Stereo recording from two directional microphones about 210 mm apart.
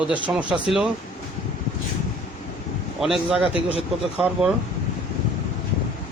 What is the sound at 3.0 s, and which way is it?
Speech, centre (ahead or behind).